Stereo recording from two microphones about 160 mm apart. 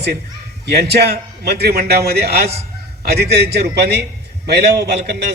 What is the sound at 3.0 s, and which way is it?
A man's voice, 90° right.